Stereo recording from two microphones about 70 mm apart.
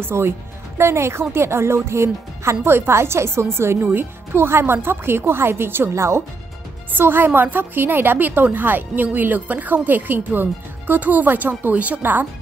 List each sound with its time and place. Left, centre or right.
0.0 s speech: right
6.9 s a woman's voice: right